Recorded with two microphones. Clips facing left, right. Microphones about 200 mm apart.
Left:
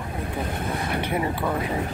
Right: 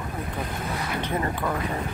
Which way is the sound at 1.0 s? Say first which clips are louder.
Left 1 dB; 10° left (ahead or behind).